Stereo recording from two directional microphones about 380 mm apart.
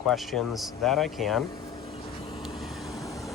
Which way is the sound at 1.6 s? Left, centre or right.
Centre.